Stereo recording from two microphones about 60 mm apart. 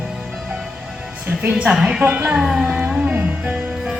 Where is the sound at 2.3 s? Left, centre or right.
Centre.